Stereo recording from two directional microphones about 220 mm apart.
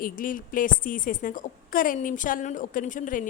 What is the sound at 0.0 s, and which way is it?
A woman's voice, 40° left (ahead or behind).